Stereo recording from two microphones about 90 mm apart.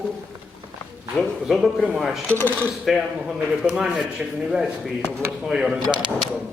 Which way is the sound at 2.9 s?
5° right (ahead or behind).